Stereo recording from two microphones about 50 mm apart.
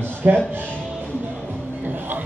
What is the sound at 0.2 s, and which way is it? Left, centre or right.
Speech, right.